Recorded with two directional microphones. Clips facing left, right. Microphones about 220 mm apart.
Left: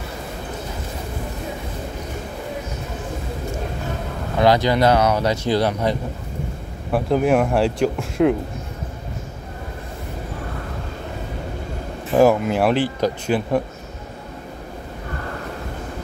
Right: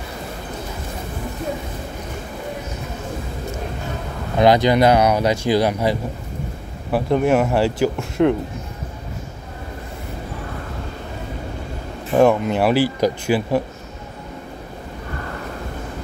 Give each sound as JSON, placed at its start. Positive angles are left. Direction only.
{"t": 4.4, "sound": "speech", "side_deg": -20}
{"t": 6.9, "sound": "speech", "side_deg": 0}
{"t": 12.1, "sound": "speech", "side_deg": 5}